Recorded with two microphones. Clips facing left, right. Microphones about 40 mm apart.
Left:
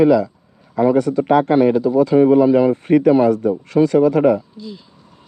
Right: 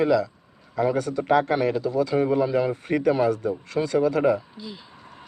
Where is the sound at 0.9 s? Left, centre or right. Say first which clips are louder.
Left 7 dB; left.